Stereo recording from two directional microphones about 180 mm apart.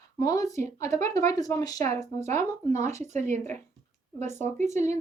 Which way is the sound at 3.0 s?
40° right (ahead or behind).